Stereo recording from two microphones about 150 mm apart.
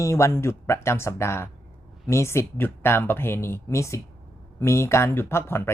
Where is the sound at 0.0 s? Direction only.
20° left (ahead or behind).